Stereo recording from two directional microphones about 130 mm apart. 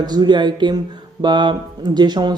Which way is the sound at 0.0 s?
35° right (ahead or behind).